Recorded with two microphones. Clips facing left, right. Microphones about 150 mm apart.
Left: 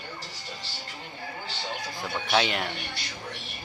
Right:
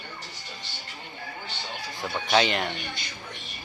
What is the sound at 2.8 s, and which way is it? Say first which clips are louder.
Speech: right 1 dB; 70° left (ahead or behind).